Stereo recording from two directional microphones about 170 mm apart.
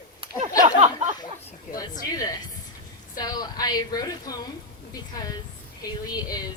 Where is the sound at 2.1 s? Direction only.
20° left (ahead or behind).